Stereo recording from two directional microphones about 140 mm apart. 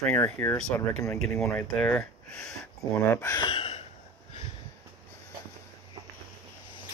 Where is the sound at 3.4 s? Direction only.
40° left (ahead or behind).